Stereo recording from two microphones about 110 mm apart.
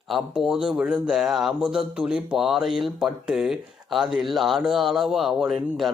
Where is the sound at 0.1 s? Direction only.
5° right (ahead or behind).